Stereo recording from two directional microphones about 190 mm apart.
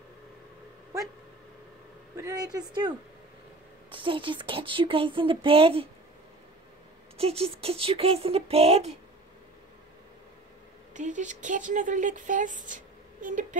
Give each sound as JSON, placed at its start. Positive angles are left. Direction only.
{"t": 2.1, "sound": "speech", "side_deg": -15}
{"t": 3.9, "sound": "speech", "side_deg": -25}
{"t": 7.2, "sound": "speech", "side_deg": -30}
{"t": 10.9, "sound": "speech", "side_deg": -40}